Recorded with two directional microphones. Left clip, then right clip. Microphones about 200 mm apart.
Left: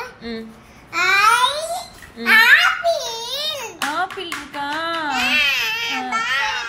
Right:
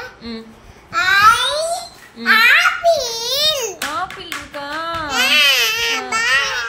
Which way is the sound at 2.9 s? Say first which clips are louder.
Right 4 dB; 35° right (ahead or behind).